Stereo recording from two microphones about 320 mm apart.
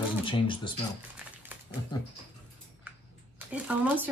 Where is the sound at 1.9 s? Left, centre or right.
Centre.